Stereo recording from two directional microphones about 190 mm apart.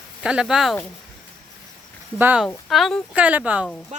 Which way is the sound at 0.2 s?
5° right (ahead or behind).